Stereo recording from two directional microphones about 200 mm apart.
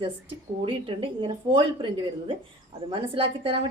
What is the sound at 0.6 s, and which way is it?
A woman's voice, 25° right (ahead or behind).